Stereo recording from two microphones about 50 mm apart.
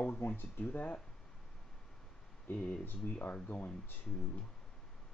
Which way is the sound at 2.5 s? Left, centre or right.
Left.